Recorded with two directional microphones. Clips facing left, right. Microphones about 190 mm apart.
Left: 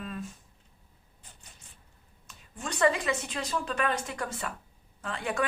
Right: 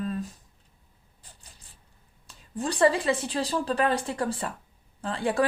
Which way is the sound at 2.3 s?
35° right (ahead or behind).